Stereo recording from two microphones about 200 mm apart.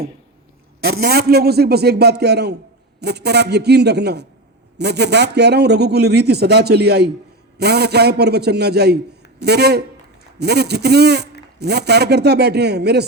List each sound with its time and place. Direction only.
0.9 s a man's voice: 50° right (ahead or behind)